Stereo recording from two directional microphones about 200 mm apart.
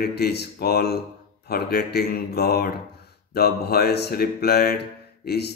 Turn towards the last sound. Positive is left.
turn(degrees=55)  # may be behind; listen again after turning